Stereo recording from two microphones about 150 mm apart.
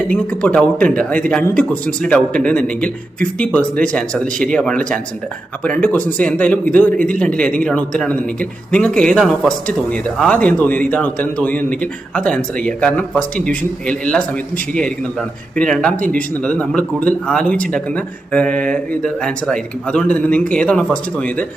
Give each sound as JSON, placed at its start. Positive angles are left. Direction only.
{"t": 0.1, "sound": "a man's voice", "side_deg": 10}